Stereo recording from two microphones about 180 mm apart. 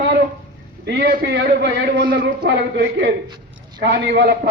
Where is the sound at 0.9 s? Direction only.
65° right (ahead or behind).